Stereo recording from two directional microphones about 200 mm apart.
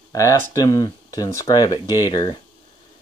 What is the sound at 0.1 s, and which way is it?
Speech, 15° left (ahead or behind).